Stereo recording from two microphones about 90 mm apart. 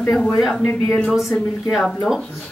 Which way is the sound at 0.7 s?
15° left (ahead or behind).